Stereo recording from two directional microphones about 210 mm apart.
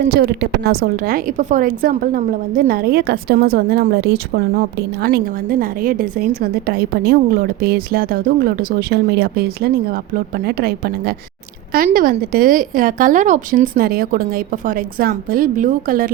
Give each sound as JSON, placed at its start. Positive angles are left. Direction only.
{"t": 0.1, "sound": "a woman's voice", "side_deg": -50}